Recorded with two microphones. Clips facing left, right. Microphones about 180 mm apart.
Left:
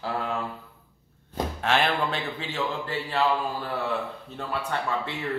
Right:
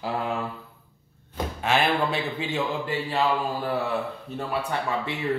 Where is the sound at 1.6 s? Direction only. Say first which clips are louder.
Right 2 dB; 5° right (ahead or behind).